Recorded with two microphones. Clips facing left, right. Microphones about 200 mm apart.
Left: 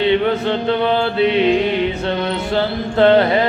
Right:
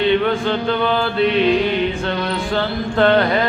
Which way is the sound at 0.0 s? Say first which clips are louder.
Left 1 dB; 30° left (ahead or behind).